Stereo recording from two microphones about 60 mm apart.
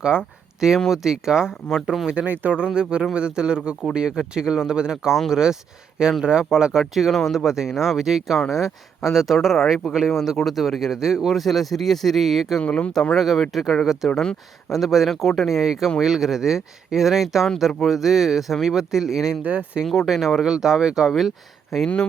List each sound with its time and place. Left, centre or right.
0.0 s speech: centre
2.1 s speech: right
2.5 s speech: centre
12.5 s speech: centre
13.1 s speech: centre
19.4 s speech: right
19.8 s speech: centre